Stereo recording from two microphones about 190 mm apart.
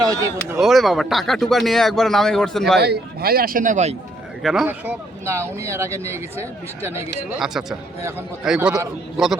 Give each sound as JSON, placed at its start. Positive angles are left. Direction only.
{"t": 0.0, "sound": "speech", "side_deg": -20}
{"t": 0.6, "sound": "speech", "side_deg": 0}
{"t": 2.8, "sound": "a man's voice", "side_deg": -55}
{"t": 4.4, "sound": "speech", "side_deg": -5}
{"t": 7.3, "sound": "speech", "side_deg": 0}